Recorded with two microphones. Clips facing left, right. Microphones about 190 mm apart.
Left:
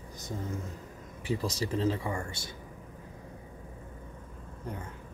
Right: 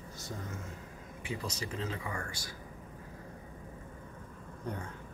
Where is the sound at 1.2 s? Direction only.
35° left (ahead or behind).